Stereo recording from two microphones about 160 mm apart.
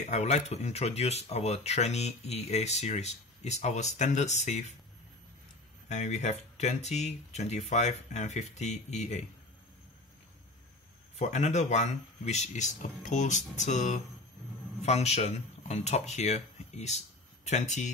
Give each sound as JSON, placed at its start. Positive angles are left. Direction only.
{"t": 0.0, "sound": "speech", "side_deg": 45}
{"t": 5.9, "sound": "speech", "side_deg": 45}
{"t": 11.1, "sound": "speech", "side_deg": 45}